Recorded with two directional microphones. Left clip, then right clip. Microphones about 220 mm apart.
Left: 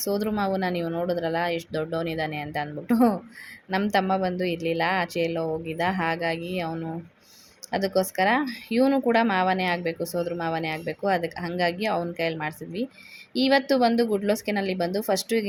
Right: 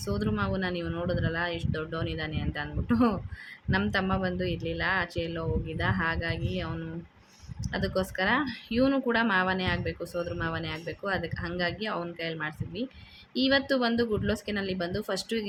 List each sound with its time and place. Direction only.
0.0 s speech: 20° left (ahead or behind)